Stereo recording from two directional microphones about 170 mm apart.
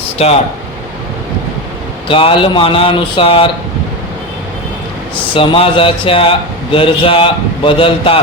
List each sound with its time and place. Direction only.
0.2 s a man's voice: 35° left (ahead or behind)
2.0 s a man's voice: 30° left (ahead or behind)
5.3 s a man's voice: 30° left (ahead or behind)